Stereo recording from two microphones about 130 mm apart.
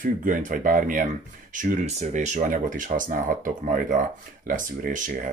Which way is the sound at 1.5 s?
80° right.